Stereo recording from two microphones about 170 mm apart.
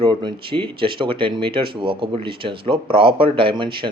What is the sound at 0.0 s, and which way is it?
Speech, 25° right (ahead or behind).